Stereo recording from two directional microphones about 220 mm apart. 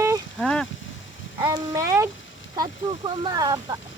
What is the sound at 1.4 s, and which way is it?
Speech, 15° right (ahead or behind).